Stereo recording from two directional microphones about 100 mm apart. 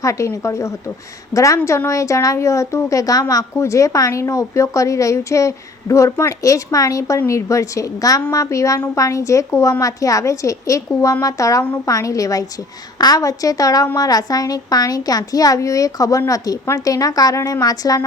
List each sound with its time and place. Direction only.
0.0 s a woman's voice: 30° left (ahead or behind)